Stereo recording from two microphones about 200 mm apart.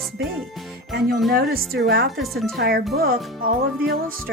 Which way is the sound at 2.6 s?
50° right (ahead or behind).